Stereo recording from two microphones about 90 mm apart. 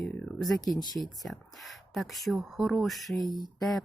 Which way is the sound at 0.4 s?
Centre (ahead or behind).